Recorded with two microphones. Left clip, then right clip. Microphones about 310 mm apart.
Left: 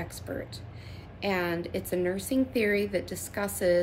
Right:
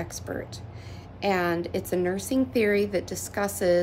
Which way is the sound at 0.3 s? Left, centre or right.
Centre.